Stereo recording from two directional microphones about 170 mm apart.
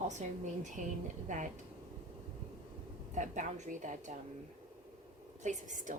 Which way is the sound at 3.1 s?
45° right (ahead or behind).